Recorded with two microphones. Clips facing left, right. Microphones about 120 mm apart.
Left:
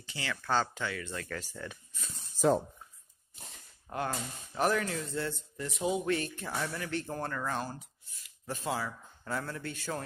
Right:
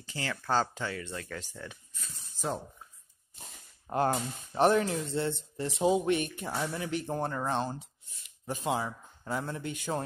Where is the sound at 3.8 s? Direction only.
35° right (ahead or behind); by 10.0 s 15° right (ahead or behind).